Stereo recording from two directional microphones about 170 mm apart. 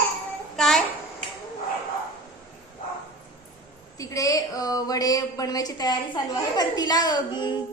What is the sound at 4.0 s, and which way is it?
A woman's voice, 20° left (ahead or behind).